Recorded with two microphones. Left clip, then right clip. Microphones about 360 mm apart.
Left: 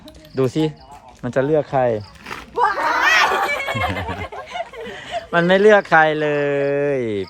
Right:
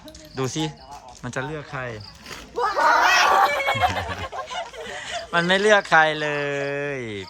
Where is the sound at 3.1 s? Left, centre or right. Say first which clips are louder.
Left 1 dB; left.